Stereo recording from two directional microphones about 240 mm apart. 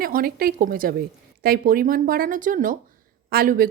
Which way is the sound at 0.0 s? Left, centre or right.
Right.